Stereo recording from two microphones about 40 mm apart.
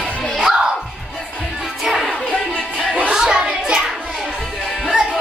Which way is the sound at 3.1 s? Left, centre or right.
Centre.